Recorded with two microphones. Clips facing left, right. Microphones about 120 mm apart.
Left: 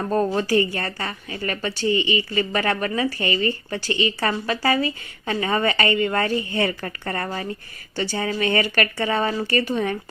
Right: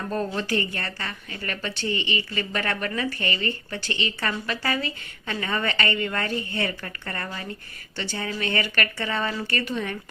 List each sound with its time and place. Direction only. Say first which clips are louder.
0.0 s a woman's voice: left 6 dB; 40° left (ahead or behind)
1.9 s a woman's voice: left 8 dB; 15° left (ahead or behind)
2.3 s speech: left 6 dB; 30° left (ahead or behind)
3.8 s a woman's voice: left 6 dB; 35° left (ahead or behind)